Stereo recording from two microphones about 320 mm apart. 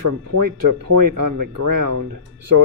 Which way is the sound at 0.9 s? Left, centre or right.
Right.